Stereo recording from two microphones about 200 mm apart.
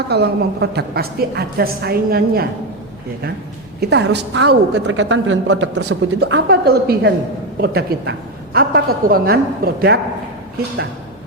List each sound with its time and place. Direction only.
0.1 s a woman's voice: 55° right (ahead or behind)
3.8 s a woman's voice: 55° right (ahead or behind)